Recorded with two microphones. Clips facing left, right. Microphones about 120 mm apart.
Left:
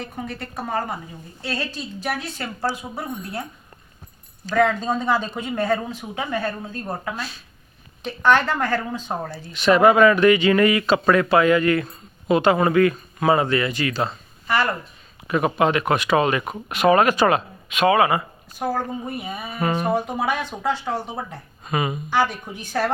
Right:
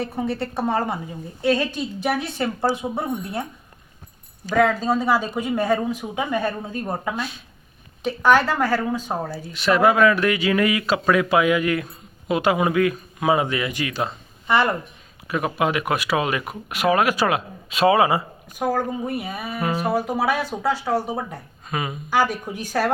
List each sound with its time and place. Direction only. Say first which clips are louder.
0.0 s a woman's voice: right 6 dB; 30° right (ahead or behind)
4.4 s speech: right 1 dB; 5° right (ahead or behind); by 14.8 s 20° right (ahead or behind)
15.3 s speech: left 3 dB; centre (ahead or behind)
17.7 s a woman's voice: even; 30° right (ahead or behind)
18.8 s speech: right 3 dB; 10° right (ahead or behind)
21.7 s speech: left 3 dB; centre (ahead or behind)
22.1 s speech: right 2 dB; 10° right (ahead or behind)